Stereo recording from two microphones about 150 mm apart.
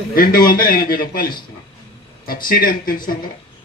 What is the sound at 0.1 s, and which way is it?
Speech, 75° left (ahead or behind).